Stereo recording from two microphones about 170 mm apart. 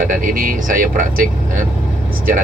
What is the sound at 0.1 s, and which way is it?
Speech, 55° right (ahead or behind).